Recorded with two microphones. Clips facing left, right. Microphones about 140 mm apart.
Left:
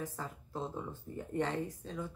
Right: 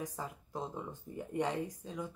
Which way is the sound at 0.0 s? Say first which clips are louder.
Even; 15° right (ahead or behind).